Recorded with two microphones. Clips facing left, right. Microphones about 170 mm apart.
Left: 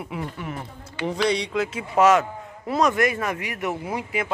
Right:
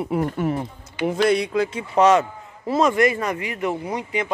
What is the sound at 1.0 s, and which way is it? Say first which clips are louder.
Speech: right 4 dB; 5° right (ahead or behind).